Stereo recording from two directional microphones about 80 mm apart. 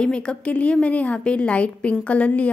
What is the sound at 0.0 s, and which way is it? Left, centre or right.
A woman's voice, centre.